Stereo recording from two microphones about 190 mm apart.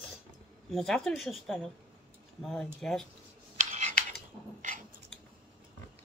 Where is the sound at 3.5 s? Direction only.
40° right (ahead or behind).